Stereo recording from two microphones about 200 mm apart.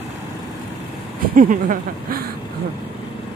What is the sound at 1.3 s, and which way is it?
Speech, 40° right (ahead or behind).